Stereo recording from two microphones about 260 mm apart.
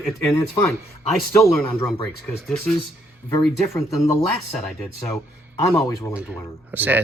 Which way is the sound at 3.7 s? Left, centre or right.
Centre.